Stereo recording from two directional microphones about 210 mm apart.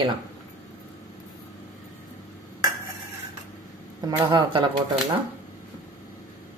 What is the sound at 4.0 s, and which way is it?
Speech, 20° right (ahead or behind).